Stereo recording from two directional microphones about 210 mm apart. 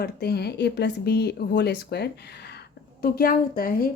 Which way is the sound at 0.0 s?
50° left (ahead or behind).